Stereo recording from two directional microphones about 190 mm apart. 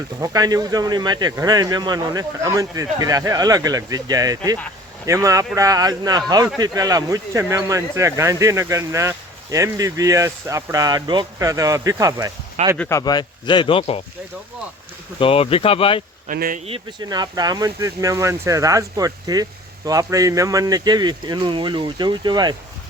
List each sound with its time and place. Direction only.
0.2 s speech: 20° right (ahead or behind)
12.7 s speech: 5° left (ahead or behind)
13.0 s speech: 20° left (ahead or behind)
15.2 s speech: 30° left (ahead or behind)
16.2 s speech: 45° right (ahead or behind)
16.6 s speech: 25° right (ahead or behind)